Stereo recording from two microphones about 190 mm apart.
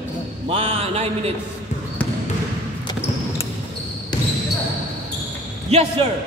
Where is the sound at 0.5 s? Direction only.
30° right (ahead or behind).